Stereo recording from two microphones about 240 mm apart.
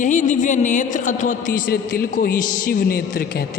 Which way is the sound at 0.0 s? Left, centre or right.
Left.